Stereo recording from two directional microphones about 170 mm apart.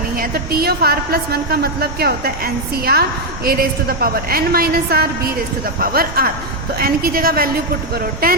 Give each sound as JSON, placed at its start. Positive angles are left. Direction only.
{"t": 0.2, "sound": "a woman's voice", "side_deg": -65}